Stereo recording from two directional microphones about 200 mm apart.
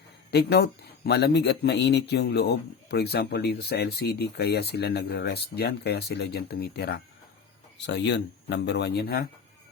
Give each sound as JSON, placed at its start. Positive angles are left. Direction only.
{"t": 0.3, "sound": "speech", "side_deg": 55}